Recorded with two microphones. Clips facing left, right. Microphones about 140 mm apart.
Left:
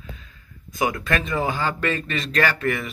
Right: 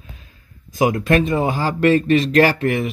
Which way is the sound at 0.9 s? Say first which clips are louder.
Right 8 dB; 25° right (ahead or behind).